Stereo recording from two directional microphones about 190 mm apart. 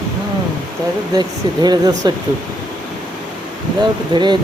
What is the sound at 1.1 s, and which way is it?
Speech, 20° right (ahead or behind).